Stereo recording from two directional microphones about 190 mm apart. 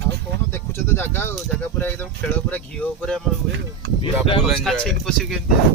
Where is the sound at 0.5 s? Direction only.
10° left (ahead or behind).